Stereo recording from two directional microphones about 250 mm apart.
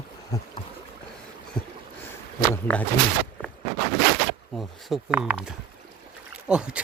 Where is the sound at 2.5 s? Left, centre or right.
Centre.